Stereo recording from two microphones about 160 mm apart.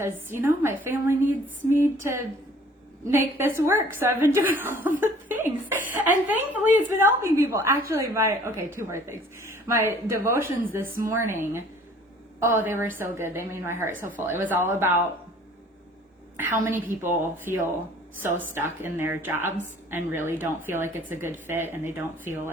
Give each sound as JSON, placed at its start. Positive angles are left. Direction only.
{"t": 0.0, "sound": "a woman's voice", "side_deg": -15}
{"t": 10.8, "sound": "speech", "side_deg": -60}
{"t": 11.1, "sound": "a woman's voice", "side_deg": -15}
{"t": 16.4, "sound": "a woman's voice", "side_deg": -15}